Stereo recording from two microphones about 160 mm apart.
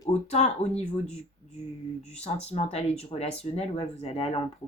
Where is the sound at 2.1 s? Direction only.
40° left (ahead or behind).